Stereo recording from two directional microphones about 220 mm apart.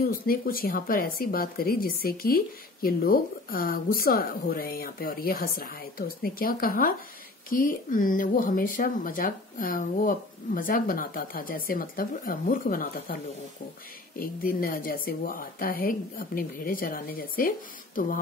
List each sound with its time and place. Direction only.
0.0 s speech: 40° left (ahead or behind)